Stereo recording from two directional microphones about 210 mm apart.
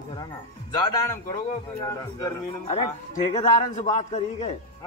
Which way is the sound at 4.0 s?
30° left (ahead or behind).